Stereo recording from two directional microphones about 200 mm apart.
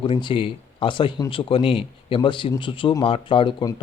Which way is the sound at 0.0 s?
25° left (ahead or behind).